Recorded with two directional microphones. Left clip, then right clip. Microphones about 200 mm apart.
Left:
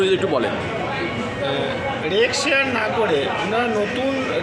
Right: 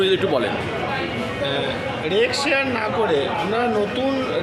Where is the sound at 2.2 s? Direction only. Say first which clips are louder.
Left 1 dB; 20° right (ahead or behind).